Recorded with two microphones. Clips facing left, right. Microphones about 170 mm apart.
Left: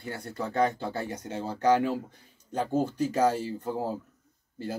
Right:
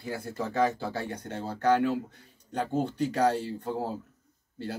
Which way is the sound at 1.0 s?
10° left (ahead or behind).